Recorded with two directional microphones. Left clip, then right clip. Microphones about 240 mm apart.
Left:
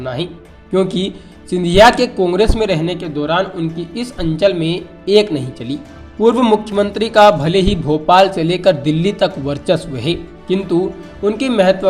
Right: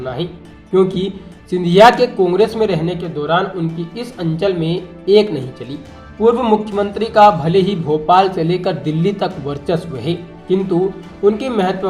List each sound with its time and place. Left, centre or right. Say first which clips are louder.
0.0 s speech: left 1 dB; left